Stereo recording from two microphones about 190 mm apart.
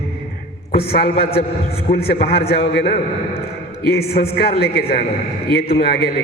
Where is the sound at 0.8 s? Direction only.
50° left (ahead or behind).